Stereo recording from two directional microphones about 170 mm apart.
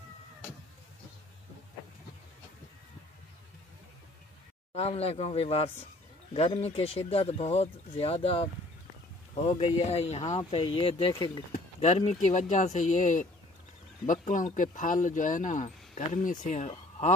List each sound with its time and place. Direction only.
4.7 s speech: 35° left (ahead or behind)
11.8 s speech: 40° left (ahead or behind)